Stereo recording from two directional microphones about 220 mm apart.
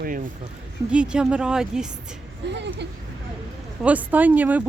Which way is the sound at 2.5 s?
50° right (ahead or behind).